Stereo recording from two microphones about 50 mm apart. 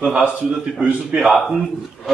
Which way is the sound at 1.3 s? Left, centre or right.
Centre.